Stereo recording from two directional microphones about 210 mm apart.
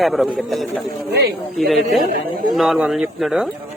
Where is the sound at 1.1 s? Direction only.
50° right (ahead or behind).